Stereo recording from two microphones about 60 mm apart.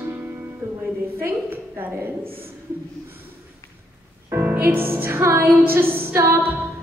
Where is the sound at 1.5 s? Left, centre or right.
Right.